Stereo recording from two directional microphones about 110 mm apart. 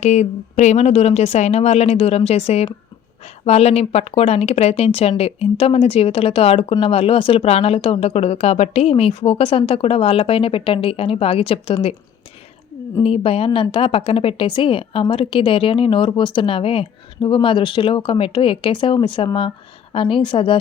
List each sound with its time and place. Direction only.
0.0 s a woman's voice: 90° left; by 11.9 s 65° left (ahead or behind)
13.0 s a woman's voice: 60° left (ahead or behind)